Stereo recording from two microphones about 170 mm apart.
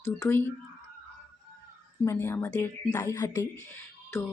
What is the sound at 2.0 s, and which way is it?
A woman's voice, 15° left (ahead or behind).